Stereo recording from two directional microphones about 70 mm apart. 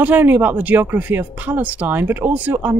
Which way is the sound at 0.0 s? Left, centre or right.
Right.